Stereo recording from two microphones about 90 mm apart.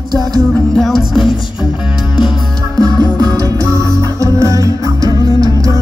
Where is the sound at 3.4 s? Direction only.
35° right (ahead or behind).